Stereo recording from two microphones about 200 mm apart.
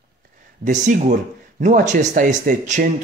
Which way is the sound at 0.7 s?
40° right (ahead or behind).